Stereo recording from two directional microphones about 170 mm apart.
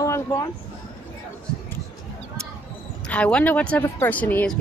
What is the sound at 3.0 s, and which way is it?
Speech, 5° left (ahead or behind).